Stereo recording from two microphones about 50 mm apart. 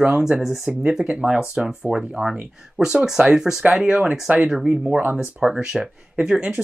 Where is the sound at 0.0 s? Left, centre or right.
Centre.